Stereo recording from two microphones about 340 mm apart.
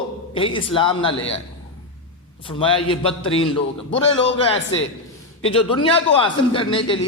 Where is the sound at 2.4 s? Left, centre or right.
Centre.